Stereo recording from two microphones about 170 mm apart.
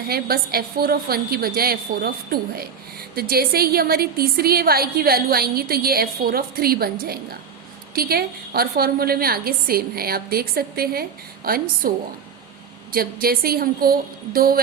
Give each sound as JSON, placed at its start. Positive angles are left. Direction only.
{"t": 0.1, "sound": "a woman's voice", "side_deg": -65}